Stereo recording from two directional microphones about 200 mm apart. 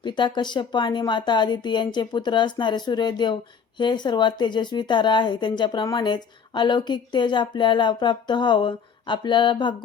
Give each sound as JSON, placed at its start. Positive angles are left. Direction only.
{"t": 0.0, "sound": "speech", "side_deg": 20}